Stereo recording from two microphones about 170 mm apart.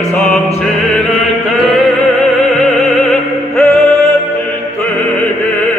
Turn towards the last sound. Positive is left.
turn(degrees=0)  # may be behind; listen again after turning